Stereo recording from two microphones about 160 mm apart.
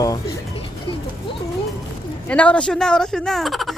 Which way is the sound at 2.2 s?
10° left (ahead or behind).